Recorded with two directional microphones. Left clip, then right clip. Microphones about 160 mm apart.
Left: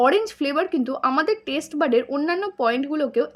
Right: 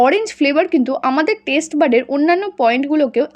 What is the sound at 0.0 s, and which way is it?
A woman's voice, 30° right (ahead or behind).